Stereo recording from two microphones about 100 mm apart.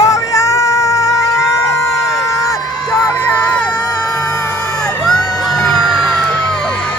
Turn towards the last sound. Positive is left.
turn(degrees=0)  # may be behind; listen again after turning